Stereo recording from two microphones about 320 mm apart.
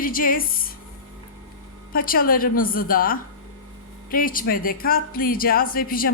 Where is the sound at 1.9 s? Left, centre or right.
Left.